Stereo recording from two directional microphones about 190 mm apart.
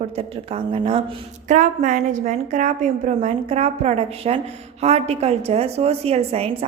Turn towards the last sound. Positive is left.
turn(degrees=-30)  # may be behind; listen again after turning